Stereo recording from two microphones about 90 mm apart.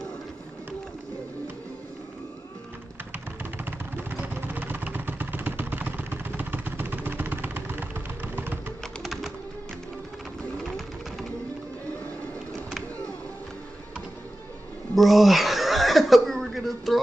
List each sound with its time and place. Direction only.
3.1 s vehicle: 25° right (ahead or behind)
8.8 s music: centre (ahead or behind)
15.0 s a sound: centre (ahead or behind)